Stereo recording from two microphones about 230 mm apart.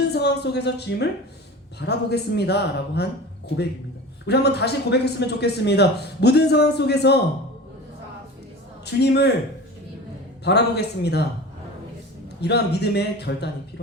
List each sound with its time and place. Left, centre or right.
0.1 s a man's voice: left
4.3 s a man's voice: left
8.8 s a man's voice: left
10.4 s a man's voice: left
12.4 s a man's voice: left